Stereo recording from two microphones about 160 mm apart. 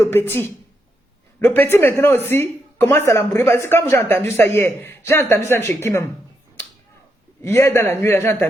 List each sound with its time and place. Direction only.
0.0 s speech: 15° left (ahead or behind)
7.4 s speech: 15° left (ahead or behind)